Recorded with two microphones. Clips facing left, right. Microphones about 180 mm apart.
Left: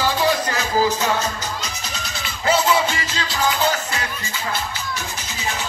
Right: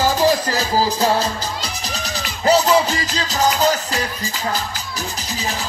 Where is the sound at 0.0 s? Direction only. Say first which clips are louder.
Right 3 dB; 40° right (ahead or behind).